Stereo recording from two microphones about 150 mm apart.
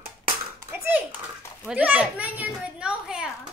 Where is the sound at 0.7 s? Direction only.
15° right (ahead or behind).